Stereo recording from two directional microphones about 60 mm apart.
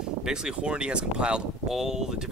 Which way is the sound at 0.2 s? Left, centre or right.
Centre.